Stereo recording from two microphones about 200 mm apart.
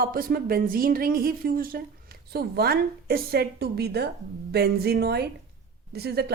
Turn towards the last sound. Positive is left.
turn(degrees=-50)  # may be behind; listen again after turning